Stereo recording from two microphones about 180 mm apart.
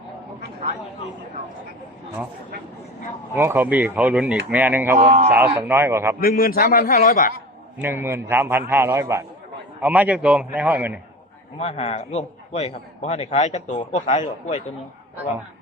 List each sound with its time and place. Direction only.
3.3 s speech: 15° right (ahead or behind)
4.9 s speech: 40° right (ahead or behind)
5.5 s speech: 15° right (ahead or behind)
6.1 s a man's voice: 55° left (ahead or behind)
7.8 s speech: 10° right (ahead or behind)
11.5 s a man's voice: 35° left (ahead or behind)